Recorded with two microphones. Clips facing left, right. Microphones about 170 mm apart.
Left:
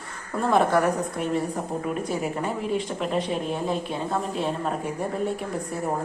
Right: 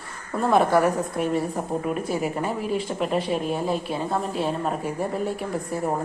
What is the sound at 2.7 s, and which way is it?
Speech, 5° right (ahead or behind).